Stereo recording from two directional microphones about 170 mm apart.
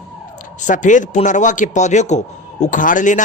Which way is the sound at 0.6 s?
45° left (ahead or behind).